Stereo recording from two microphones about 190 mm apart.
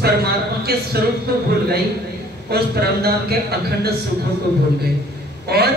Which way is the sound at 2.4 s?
55° right (ahead or behind).